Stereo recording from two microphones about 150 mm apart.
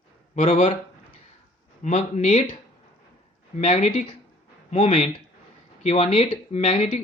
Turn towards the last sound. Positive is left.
turn(degrees=45)  # may be behind; listen again after turning